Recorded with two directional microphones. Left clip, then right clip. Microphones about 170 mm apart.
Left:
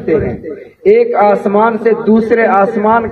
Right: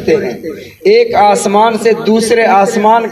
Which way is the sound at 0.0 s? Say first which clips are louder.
Right 2 dB; 40° right (ahead or behind).